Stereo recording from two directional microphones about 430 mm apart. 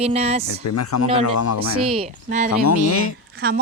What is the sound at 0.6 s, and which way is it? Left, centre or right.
Speech, left.